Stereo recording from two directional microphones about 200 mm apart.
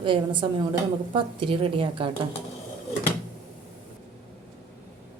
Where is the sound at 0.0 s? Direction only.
25° right (ahead or behind).